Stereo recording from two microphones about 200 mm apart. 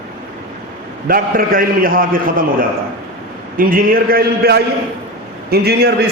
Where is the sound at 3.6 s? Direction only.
45° right (ahead or behind).